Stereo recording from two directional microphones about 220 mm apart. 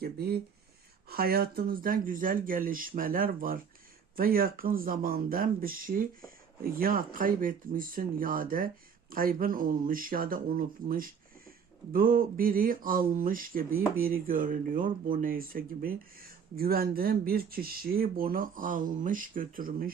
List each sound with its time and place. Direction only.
0.0 s speech: 45° right (ahead or behind)